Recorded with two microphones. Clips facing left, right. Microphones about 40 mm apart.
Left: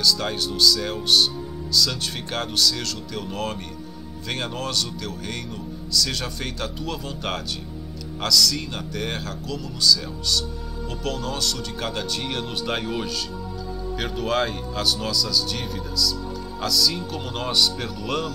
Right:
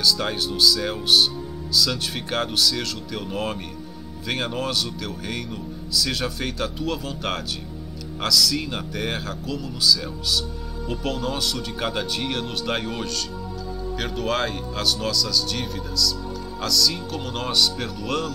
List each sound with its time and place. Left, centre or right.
0.0 s speech: centre